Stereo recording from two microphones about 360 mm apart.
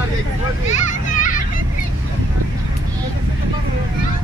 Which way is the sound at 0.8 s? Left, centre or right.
Left.